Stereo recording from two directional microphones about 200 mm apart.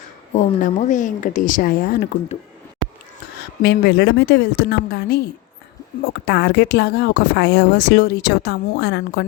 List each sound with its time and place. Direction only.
0.3 s speech: 40° left (ahead or behind)
3.6 s speech: 50° left (ahead or behind)
6.2 s speech: 55° left (ahead or behind)